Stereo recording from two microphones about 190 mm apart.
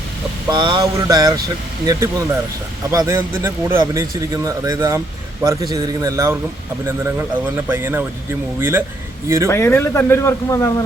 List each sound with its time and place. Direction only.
0.4 s a sound: 25° right (ahead or behind)
1.9 s a man's voice: 20° right (ahead or behind)
9.5 s a man's voice: 15° left (ahead or behind)